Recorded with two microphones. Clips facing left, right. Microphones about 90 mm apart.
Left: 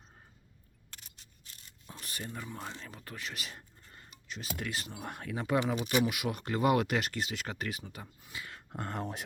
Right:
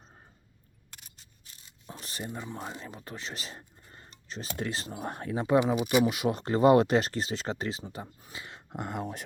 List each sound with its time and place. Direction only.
0.9 s single-lens reflex camera: 10° right (ahead or behind)
1.9 s speech: 25° right (ahead or behind)
5.7 s speech: 10° right (ahead or behind)
6.1 s speech: 25° right (ahead or behind); by 9.2 s 5° right (ahead or behind)